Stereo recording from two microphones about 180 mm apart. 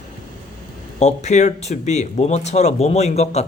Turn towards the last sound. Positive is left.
turn(degrees=40)  # may be behind; listen again after turning